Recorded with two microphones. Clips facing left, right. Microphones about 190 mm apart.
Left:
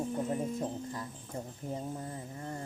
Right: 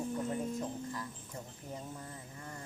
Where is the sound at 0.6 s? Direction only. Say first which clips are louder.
Left 2 dB; 30° left (ahead or behind).